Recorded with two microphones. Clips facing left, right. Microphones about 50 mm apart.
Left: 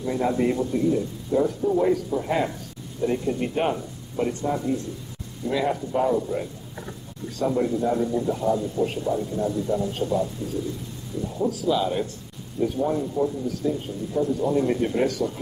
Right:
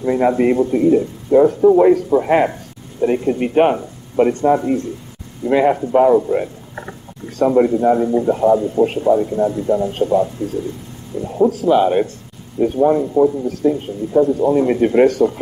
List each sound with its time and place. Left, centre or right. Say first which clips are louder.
0.0 s a man's voice: right 8 dB; right